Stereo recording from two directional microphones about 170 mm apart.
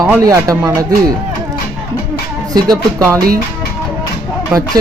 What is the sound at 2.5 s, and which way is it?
Speech, 20° right (ahead or behind).